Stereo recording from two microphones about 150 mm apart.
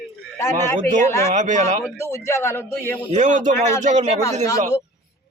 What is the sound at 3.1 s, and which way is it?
Speech, 55° right (ahead or behind).